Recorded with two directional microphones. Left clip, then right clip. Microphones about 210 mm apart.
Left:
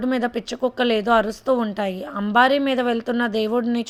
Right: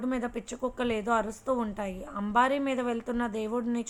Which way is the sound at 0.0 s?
40° left (ahead or behind).